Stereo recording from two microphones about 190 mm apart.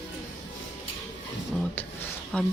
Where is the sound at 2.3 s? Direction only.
5° left (ahead or behind).